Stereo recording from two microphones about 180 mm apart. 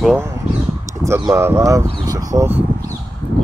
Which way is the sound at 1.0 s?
15° right (ahead or behind).